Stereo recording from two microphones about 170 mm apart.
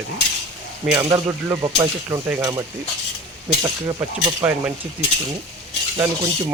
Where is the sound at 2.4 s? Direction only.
20° right (ahead or behind).